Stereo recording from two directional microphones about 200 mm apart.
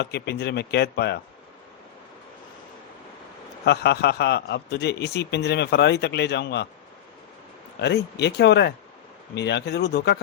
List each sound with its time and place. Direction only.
0.0 s a man's voice: 55° left (ahead or behind)
3.7 s a man's voice: 55° left (ahead or behind)
7.8 s a man's voice: 60° left (ahead or behind)